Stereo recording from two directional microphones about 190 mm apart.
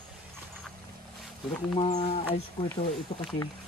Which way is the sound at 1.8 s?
30° left (ahead or behind).